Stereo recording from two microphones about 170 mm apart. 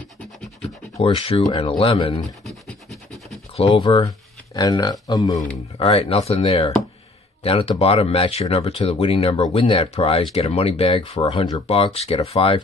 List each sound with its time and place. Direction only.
0.6 s speech: 35° left (ahead or behind)
2.4 s scratch: centre (ahead or behind)
3.5 s speech: 30° left (ahead or behind)